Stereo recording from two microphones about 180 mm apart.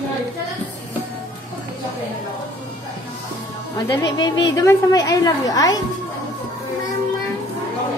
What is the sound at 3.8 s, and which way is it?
A woman's voice, 25° left (ahead or behind).